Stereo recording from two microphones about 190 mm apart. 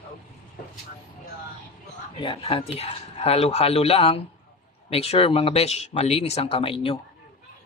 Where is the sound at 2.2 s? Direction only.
25° left (ahead or behind).